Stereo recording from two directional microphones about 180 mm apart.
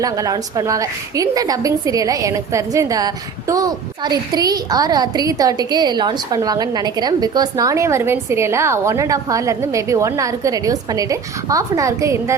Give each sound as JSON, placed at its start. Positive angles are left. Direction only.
{"t": 0.0, "sound": "a woman's voice", "side_deg": -20}